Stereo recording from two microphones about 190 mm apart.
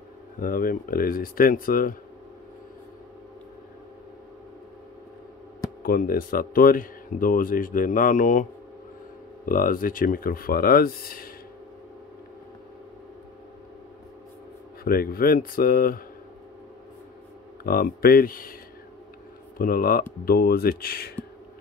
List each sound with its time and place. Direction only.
0.4 s speech: 50° left (ahead or behind)
5.8 s speech: 50° left (ahead or behind)
9.5 s speech: 45° left (ahead or behind)
14.9 s speech: 50° left (ahead or behind)
17.6 s speech: 50° left (ahead or behind)
19.6 s speech: 50° left (ahead or behind)